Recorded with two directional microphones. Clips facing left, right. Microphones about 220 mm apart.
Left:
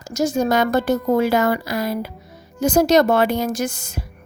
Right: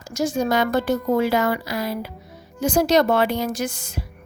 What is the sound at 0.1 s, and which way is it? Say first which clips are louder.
Speech: left 3 dB; 40° left (ahead or behind).